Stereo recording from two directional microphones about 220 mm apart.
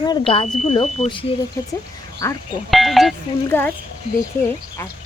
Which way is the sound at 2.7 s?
Centre (ahead or behind).